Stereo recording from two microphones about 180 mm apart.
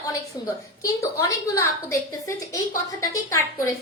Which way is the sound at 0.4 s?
20° left (ahead or behind).